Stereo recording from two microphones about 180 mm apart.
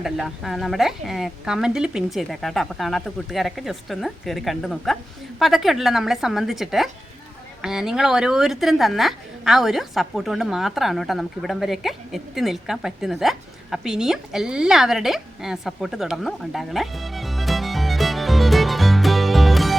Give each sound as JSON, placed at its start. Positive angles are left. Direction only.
{"t": 0.0, "sound": "speech", "side_deg": 0}